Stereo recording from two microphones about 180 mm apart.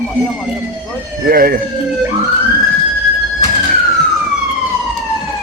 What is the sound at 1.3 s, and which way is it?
Speech, 55° right (ahead or behind).